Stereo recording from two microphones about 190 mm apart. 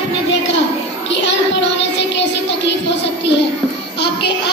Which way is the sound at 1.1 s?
70° left (ahead or behind).